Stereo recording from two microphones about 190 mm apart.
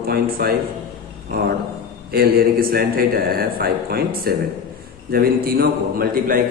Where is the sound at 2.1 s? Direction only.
55° right (ahead or behind).